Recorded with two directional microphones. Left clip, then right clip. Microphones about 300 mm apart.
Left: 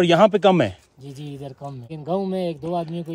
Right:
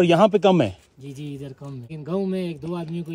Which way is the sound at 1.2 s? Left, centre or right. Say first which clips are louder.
Left 4 dB; left.